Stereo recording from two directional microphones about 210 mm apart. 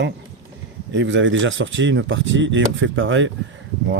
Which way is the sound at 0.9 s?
65° right (ahead or behind).